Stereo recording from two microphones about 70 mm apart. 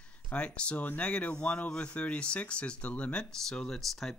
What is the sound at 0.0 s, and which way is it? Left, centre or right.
Speech, centre.